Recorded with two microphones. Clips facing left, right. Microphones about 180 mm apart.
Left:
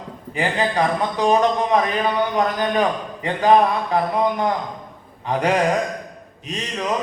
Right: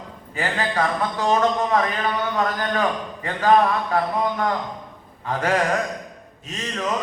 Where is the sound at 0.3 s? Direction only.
15° left (ahead or behind).